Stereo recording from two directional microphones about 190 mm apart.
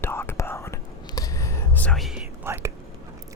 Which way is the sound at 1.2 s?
15° left (ahead or behind).